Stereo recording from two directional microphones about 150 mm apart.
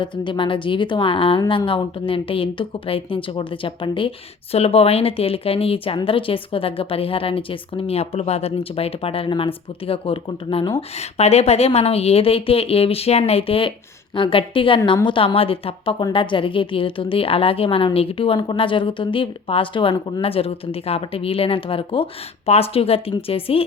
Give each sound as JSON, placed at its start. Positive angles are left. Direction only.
{"t": 0.0, "sound": "speech", "side_deg": 35}